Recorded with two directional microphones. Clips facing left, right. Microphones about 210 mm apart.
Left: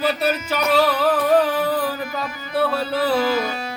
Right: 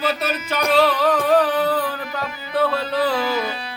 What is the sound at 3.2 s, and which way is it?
Music, 45° left (ahead or behind).